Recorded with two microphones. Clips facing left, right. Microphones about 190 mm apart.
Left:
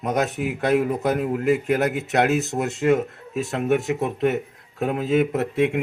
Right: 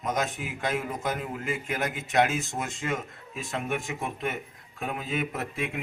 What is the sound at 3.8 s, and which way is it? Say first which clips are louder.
Speech: left 10 dB; 65° left (ahead or behind).